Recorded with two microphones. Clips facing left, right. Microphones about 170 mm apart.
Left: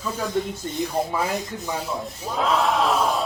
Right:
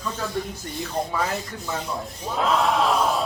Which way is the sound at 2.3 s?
Centre (ahead or behind).